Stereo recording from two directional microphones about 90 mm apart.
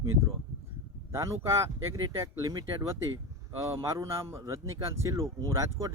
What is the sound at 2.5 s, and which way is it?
Speech, 55° right (ahead or behind).